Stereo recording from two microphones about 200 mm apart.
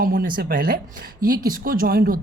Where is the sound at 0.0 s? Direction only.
45° right (ahead or behind).